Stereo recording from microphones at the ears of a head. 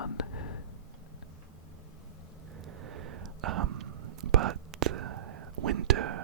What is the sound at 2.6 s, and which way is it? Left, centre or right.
Whispering, right.